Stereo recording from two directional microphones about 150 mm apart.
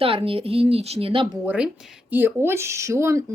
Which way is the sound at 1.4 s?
5° right (ahead or behind).